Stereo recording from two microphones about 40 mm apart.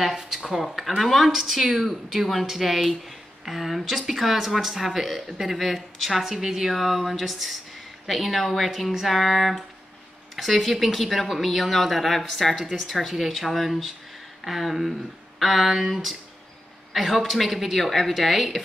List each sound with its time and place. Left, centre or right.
0.1 s speech: centre